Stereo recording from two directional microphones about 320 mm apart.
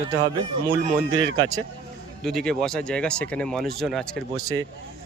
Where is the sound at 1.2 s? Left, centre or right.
Right.